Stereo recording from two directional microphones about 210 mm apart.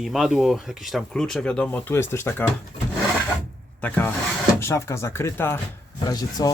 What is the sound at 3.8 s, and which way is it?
Speech, 10° left (ahead or behind).